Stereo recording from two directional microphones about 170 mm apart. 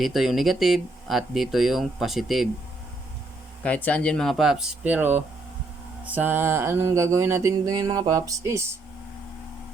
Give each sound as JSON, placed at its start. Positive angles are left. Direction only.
{"t": 0.0, "sound": "speech", "side_deg": 0}
{"t": 3.6, "sound": "speech", "side_deg": 10}
{"t": 6.1, "sound": "mantra", "side_deg": -10}